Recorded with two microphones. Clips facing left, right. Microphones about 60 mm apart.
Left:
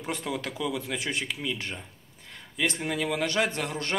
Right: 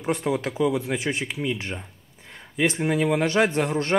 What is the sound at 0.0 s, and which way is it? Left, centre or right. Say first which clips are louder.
A man's voice: right 7 dB; right.